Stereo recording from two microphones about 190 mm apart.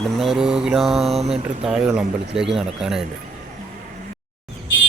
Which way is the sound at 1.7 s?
5° right (ahead or behind).